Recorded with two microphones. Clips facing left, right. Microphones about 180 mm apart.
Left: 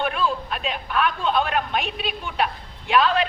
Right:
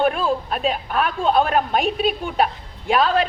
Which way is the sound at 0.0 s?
40° right (ahead or behind).